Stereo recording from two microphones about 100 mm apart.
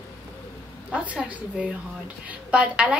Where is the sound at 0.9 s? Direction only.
15° right (ahead or behind).